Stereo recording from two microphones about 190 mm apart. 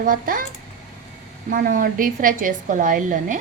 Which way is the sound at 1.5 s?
45° right (ahead or behind).